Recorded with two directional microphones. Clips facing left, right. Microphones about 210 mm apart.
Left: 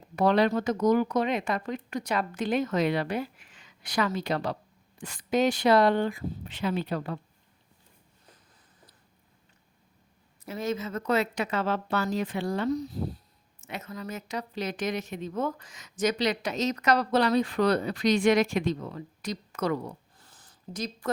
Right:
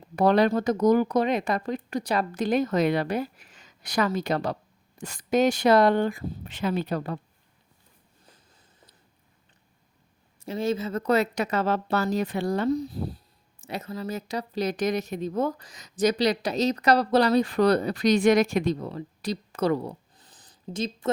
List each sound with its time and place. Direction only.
0.2 s speech: 40° right (ahead or behind)
10.4 s speech: 30° right (ahead or behind)
20.1 s a sound: 20° right (ahead or behind)